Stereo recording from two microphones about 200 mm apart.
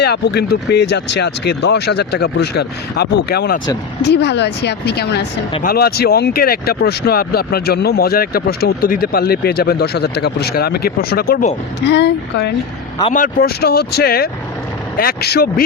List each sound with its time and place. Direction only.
0.0 s speech: 55° left (ahead or behind)
11.9 s speech: 60° left (ahead or behind)
13.1 s speech: 45° left (ahead or behind)